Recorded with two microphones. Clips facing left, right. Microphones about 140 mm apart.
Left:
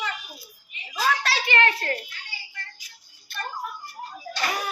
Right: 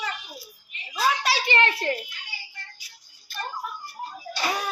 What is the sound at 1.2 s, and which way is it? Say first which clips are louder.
Speech: even; 20° right (ahead or behind).